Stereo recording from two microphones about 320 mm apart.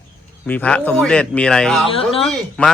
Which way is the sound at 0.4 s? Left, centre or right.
Centre.